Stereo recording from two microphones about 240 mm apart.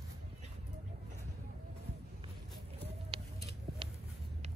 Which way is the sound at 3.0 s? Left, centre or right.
Right.